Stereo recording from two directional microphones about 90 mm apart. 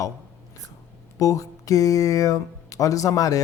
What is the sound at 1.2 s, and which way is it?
A man's voice, 40° left (ahead or behind).